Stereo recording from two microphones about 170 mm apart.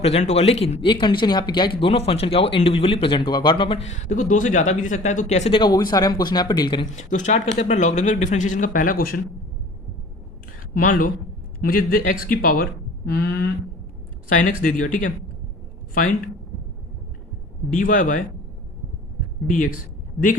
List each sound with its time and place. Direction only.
0.0 s speech: 40° left (ahead or behind)
3.8 s speech: 45° left (ahead or behind)
5.5 s speech: 25° left (ahead or behind)
6.9 s speech: 45° left (ahead or behind); by 9.2 s 60° left (ahead or behind)
10.8 s a man's voice: 55° left (ahead or behind)
14.3 s a man's voice: 50° left (ahead or behind)
17.7 s speech: 50° left (ahead or behind)
19.5 s speech: 50° left (ahead or behind)